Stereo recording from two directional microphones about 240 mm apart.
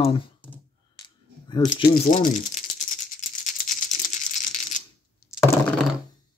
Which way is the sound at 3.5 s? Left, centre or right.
Left.